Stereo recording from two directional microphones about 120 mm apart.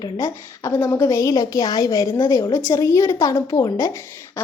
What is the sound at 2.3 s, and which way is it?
A woman's voice, 25° left (ahead or behind).